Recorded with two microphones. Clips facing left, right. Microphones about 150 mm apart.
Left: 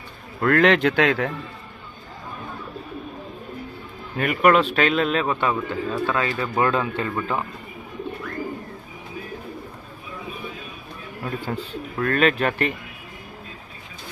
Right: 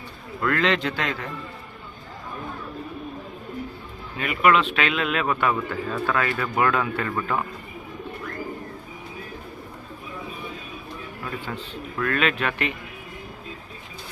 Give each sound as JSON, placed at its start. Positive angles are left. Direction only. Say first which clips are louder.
{"t": 0.4, "sound": "a man's voice", "louder": "left 6 dB", "side_deg": 55}
{"t": 4.2, "sound": "speech", "louder": "left 3 dB", "side_deg": 50}
{"t": 5.2, "sound": "speech", "louder": "even", "side_deg": 25}
{"t": 11.2, "sound": "speech", "louder": "left 5 dB", "side_deg": 35}